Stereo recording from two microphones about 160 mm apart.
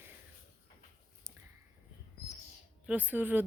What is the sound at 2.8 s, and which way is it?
Speech, 10° right (ahead or behind).